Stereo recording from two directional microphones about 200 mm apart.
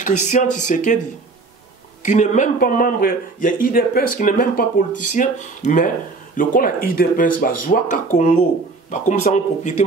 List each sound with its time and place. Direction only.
0.0 s speech: 40° left (ahead or behind)
2.0 s speech: 40° left (ahead or behind)